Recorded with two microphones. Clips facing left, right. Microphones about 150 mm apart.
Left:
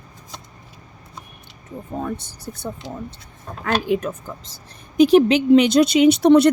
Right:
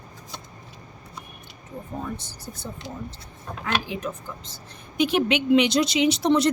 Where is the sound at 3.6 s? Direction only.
55° left (ahead or behind).